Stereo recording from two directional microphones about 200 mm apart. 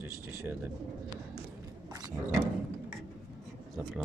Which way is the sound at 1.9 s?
20° right (ahead or behind).